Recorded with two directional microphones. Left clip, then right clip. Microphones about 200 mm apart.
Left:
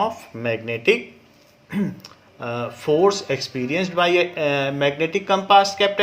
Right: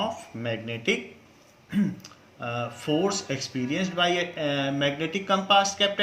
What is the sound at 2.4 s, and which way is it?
Speech, 35° left (ahead or behind).